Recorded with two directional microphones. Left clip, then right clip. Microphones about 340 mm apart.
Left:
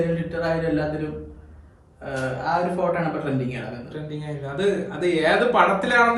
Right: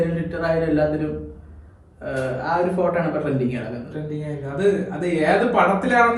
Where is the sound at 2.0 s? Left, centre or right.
Centre.